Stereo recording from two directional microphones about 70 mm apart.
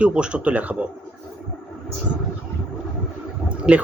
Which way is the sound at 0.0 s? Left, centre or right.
Centre.